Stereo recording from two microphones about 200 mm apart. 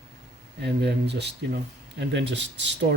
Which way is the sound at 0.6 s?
55° right (ahead or behind).